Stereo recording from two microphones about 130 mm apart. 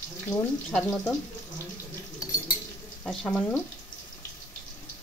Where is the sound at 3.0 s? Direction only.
10° left (ahead or behind).